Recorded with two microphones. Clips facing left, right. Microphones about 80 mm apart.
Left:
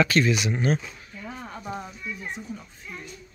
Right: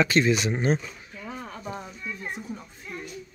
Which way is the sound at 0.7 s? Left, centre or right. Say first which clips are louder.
Left 1 dB; centre.